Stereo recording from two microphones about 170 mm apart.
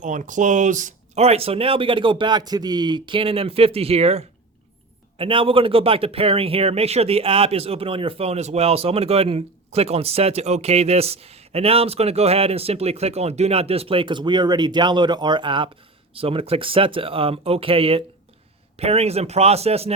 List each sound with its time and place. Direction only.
0.0 s speech: 45° right (ahead or behind)